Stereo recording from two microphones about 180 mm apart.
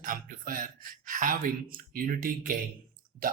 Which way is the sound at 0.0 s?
50° right (ahead or behind).